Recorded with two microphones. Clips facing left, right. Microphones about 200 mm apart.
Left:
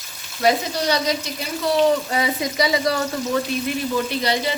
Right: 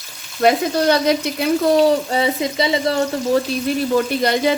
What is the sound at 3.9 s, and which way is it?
Speech, 50° right (ahead or behind).